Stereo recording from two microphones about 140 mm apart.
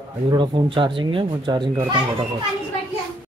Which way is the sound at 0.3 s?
35° right (ahead or behind).